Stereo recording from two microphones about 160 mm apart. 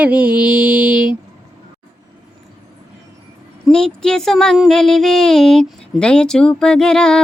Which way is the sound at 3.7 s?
5° left (ahead or behind).